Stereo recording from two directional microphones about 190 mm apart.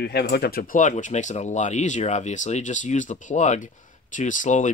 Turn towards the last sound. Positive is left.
turn(degrees=40)  # may be behind; listen again after turning